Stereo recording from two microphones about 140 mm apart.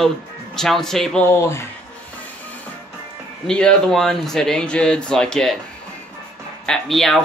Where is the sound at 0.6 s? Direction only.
5° left (ahead or behind).